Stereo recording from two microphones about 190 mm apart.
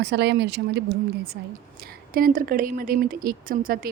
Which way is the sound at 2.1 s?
50° right (ahead or behind).